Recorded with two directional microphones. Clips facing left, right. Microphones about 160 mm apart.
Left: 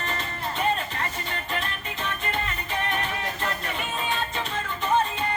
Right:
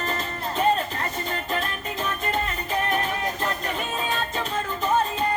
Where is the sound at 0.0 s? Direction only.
35° right (ahead or behind).